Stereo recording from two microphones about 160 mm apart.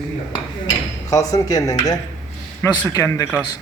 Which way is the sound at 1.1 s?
20° left (ahead or behind).